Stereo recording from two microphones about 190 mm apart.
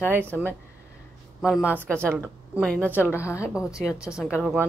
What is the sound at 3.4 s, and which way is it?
Speech, 5° right (ahead or behind).